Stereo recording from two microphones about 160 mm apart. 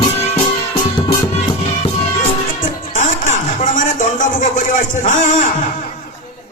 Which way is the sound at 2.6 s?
50° left (ahead or behind).